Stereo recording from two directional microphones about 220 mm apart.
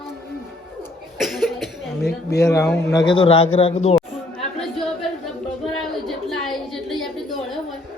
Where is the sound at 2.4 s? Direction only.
15° left (ahead or behind).